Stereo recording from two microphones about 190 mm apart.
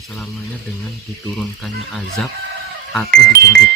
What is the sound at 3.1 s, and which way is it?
Speech, 55° right (ahead or behind).